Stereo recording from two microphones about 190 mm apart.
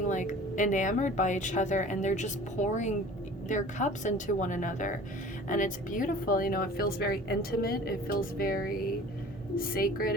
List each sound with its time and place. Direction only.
0.1 s speech: 40° left (ahead or behind)